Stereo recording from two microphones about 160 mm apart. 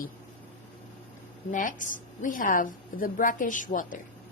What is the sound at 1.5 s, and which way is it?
A woman's voice, 55° left (ahead or behind).